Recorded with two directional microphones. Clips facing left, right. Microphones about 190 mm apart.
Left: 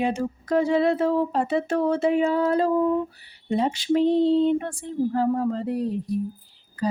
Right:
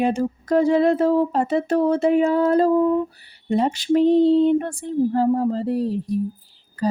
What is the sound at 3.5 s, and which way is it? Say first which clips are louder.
Speech: right 3 dB; 45° right (ahead or behind).